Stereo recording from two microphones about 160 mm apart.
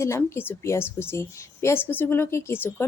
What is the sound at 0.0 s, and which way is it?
A woman's voice, 15° left (ahead or behind).